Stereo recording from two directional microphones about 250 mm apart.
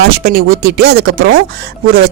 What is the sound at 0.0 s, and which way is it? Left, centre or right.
Speech, right.